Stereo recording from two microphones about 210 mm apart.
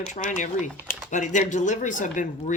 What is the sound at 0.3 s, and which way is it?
Speech, 35° left (ahead or behind).